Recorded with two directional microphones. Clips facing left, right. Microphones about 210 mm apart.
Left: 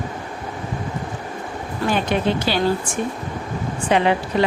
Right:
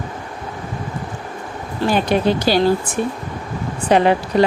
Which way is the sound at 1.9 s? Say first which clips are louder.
Right 4 dB; 40° right (ahead or behind).